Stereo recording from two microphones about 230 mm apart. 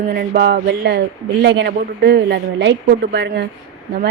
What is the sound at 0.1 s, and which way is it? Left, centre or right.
A man's voice, right.